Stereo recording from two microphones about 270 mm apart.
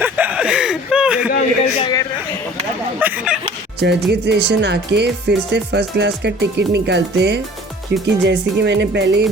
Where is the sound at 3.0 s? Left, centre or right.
Centre.